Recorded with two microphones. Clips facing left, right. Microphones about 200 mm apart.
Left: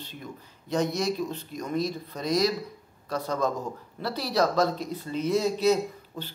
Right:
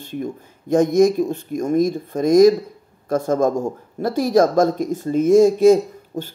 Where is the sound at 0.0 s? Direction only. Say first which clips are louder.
Right 13 dB; 50° right (ahead or behind).